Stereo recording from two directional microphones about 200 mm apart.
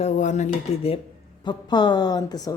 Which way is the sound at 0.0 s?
35° left (ahead or behind).